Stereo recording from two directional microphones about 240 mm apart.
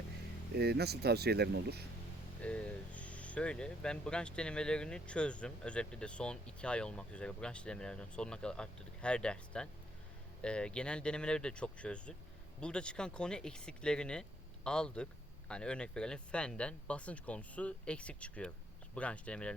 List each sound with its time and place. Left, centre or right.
0.5 s speech: right
2.4 s speech: centre